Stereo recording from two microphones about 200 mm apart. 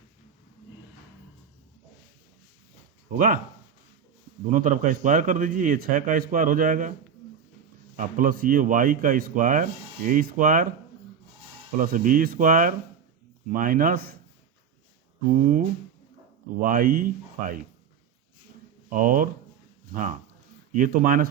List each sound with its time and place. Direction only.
3.1 s a man's voice: 45° right (ahead or behind)
4.5 s speech: 40° right (ahead or behind)
7.9 s a man's voice: 45° right (ahead or behind)
11.8 s a man's voice: 45° right (ahead or behind)
15.3 s a man's voice: 45° right (ahead or behind)
16.6 s a man's voice: 45° right (ahead or behind)
18.9 s a man's voice: 45° right (ahead or behind)